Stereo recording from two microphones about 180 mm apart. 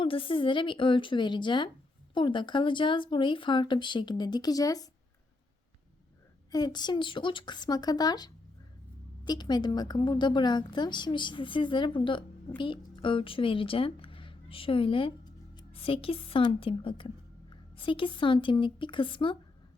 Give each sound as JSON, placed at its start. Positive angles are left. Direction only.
{"t": 0.0, "sound": "a woman's voice", "side_deg": 30}
{"t": 6.5, "sound": "a woman's voice", "side_deg": 20}